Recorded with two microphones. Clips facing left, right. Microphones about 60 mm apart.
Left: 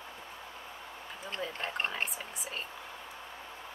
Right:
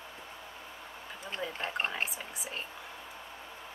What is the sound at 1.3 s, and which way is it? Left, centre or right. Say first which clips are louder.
Speech: right 1 dB; centre.